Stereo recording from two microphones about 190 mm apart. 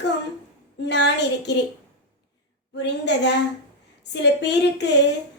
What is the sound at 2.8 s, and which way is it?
A woman's voice, 65° left (ahead or behind).